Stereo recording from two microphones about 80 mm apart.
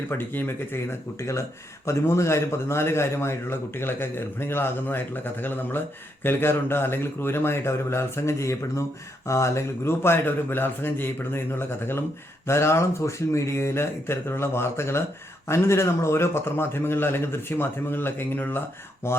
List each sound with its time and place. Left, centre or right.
0.1 s a man's voice: left
12.5 s a man's voice: left